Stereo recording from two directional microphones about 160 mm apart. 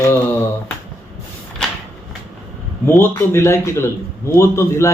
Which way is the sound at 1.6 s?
5° left (ahead or behind).